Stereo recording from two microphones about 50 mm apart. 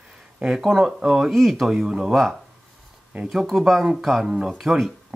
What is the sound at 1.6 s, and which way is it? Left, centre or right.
Speech, centre.